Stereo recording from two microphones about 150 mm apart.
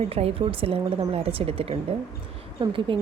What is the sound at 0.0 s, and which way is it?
Speech, 40° right (ahead or behind).